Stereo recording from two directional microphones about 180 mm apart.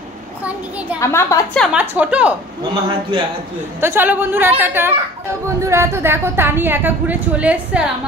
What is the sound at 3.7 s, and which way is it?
A woman's voice, 10° right (ahead or behind).